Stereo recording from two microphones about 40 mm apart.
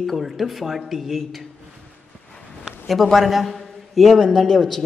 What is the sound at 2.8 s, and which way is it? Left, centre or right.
Speech, centre.